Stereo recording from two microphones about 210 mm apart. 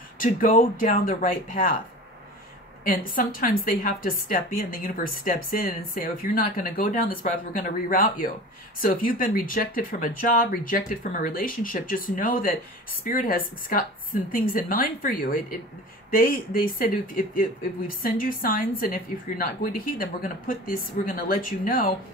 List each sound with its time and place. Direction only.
0.2 s speech: 40° left (ahead or behind)
2.8 s speech: 40° left (ahead or behind)